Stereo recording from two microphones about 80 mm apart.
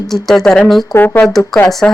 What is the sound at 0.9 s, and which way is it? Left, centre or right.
Speech, left.